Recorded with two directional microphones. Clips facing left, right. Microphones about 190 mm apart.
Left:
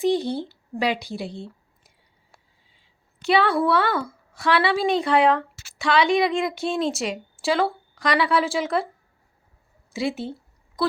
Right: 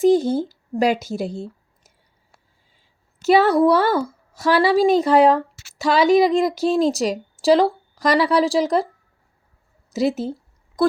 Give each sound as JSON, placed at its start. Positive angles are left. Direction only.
{"t": 0.0, "sound": "a woman's voice", "side_deg": -45}
{"t": 9.9, "sound": "a woman's voice", "side_deg": -40}